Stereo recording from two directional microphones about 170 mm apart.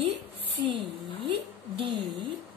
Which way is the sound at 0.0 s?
30° right (ahead or behind).